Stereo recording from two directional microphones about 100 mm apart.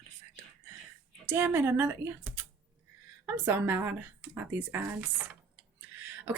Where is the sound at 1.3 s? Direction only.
20° right (ahead or behind).